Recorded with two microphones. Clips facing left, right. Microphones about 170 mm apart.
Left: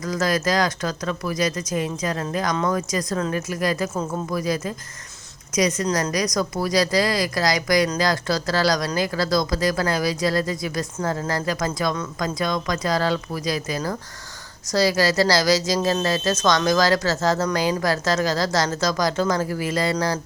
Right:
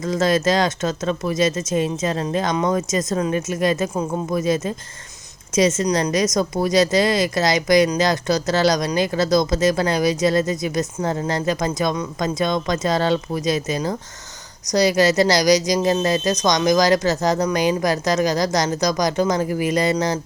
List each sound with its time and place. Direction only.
0.0 s a woman's voice: 25° right (ahead or behind)